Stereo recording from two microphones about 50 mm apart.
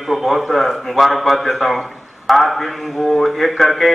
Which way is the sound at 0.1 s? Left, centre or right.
Centre.